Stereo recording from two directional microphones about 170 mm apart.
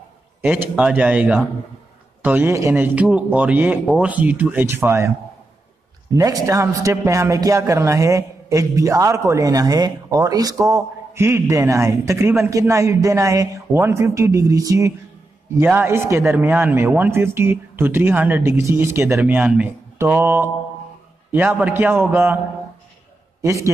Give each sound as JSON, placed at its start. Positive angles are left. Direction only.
{"t": 0.4, "sound": "a man's voice", "side_deg": -10}
{"t": 6.1, "sound": "a man's voice", "side_deg": -20}
{"t": 23.4, "sound": "a man's voice", "side_deg": -15}